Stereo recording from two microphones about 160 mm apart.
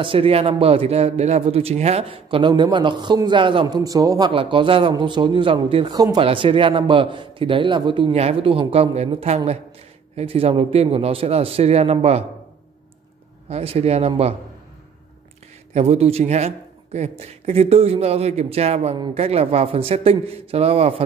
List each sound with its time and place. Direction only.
0.0 s a man's voice: 35° right (ahead or behind)
13.5 s a man's voice: 40° right (ahead or behind)
15.7 s a man's voice: 45° right (ahead or behind)